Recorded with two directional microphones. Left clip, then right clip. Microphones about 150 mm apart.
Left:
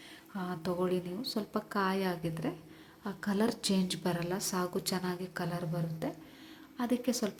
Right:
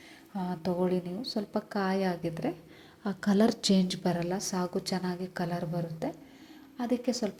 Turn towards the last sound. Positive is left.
turn(degrees=-5)  # may be behind; listen again after turning